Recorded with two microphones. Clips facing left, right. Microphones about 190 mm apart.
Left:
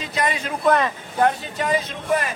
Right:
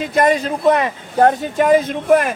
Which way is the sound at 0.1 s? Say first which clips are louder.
Right 9 dB; 50° right (ahead or behind).